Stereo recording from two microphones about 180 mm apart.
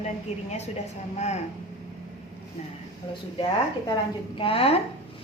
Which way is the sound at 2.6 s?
35° left (ahead or behind).